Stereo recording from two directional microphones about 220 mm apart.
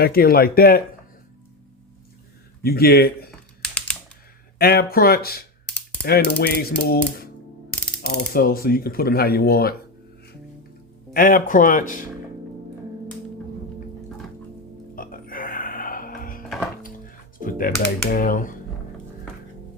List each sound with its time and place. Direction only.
0.0 s speech: 45° left (ahead or behind)
2.6 s speech: 45° left (ahead or behind)
3.6 s typing: 5° left (ahead or behind)
4.5 s speech: 45° left (ahead or behind)
7.7 s music: 5° left (ahead or behind)
8.3 s speech: 40° left (ahead or behind)
11.1 s speech: 40° left (ahead or behind)
14.9 s music: 40° left (ahead or behind)
17.4 s speech: 40° left (ahead or behind)